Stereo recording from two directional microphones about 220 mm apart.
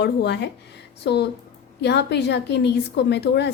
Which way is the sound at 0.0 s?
50° left (ahead or behind).